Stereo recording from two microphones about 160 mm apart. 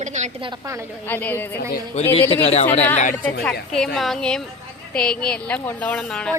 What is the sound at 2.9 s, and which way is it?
Speech, 50° left (ahead or behind).